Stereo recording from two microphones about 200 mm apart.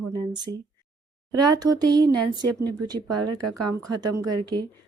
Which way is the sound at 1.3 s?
20° right (ahead or behind).